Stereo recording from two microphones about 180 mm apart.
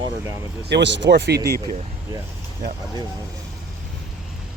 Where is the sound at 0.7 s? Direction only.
75° right (ahead or behind).